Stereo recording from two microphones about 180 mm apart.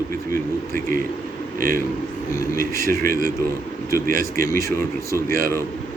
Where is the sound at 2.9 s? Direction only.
55° right (ahead or behind).